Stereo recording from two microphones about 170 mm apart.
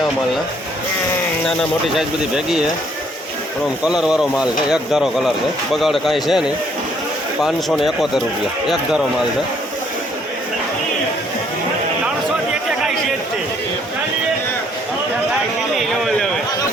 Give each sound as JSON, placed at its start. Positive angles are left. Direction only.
{"t": 2.0, "sound": "speech", "side_deg": -5}
{"t": 3.8, "sound": "speech", "side_deg": -5}